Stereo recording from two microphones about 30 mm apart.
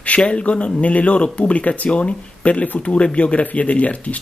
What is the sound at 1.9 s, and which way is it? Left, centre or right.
Speech, left.